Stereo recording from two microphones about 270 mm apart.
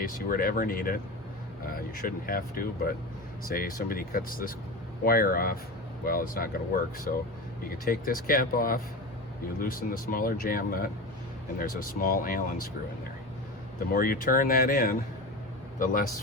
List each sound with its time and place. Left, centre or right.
0.0 s speech: left
7.6 s speech: left
13.9 s speech: left